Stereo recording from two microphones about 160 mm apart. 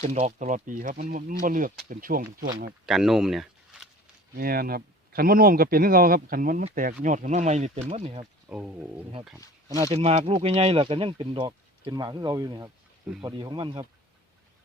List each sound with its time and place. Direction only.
0.0 s speech: 45° right (ahead or behind)
2.8 s speech: centre (ahead or behind)
4.4 s speech: 70° right (ahead or behind); by 8.3 s 40° right (ahead or behind)
8.4 s speech: 10° right (ahead or behind)
9.6 s speech: 20° right (ahead or behind)
9.9 s speech: 40° right (ahead or behind)